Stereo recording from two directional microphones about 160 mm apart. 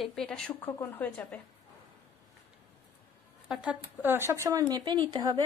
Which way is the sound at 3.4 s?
10° right (ahead or behind).